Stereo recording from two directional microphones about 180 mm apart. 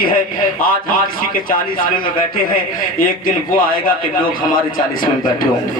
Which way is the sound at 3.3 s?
50° left (ahead or behind).